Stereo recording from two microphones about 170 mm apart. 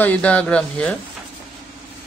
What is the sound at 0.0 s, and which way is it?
Speech, 10° left (ahead or behind).